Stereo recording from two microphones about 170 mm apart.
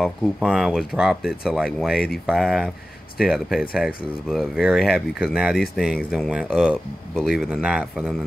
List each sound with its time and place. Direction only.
0.0 s speech: 5° right (ahead or behind)